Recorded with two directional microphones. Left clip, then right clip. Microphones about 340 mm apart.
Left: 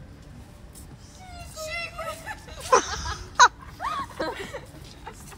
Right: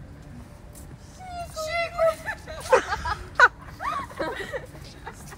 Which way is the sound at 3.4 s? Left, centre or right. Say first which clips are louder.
Left 1 dB; centre.